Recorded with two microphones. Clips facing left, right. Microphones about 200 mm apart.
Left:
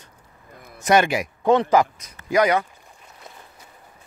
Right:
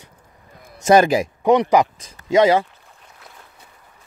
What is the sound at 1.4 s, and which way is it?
Speech, 15° right (ahead or behind).